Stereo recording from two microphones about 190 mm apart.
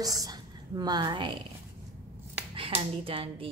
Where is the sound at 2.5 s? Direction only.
30° right (ahead or behind).